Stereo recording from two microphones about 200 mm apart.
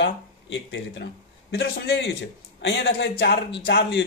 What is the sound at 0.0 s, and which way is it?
Speech, 60° left (ahead or behind).